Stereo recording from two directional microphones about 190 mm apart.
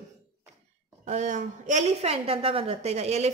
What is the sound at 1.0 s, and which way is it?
A woman's voice, 40° right (ahead or behind).